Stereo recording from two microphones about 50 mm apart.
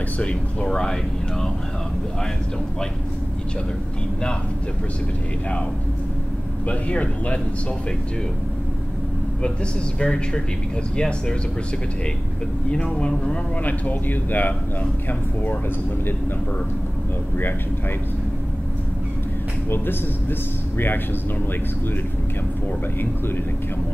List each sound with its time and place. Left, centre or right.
0.2 s speech: left
0.7 s speech: centre
6.7 s speech: left
9.9 s speech: centre
12.9 s speech: centre
13.7 s a man's voice: left
19.7 s speech: left